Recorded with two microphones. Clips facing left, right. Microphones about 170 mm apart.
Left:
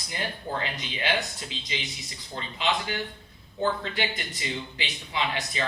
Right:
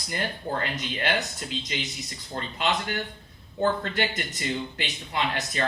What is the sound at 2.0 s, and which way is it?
Speech, 50° right (ahead or behind).